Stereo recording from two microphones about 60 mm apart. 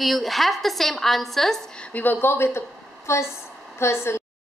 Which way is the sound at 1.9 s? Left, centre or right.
Left.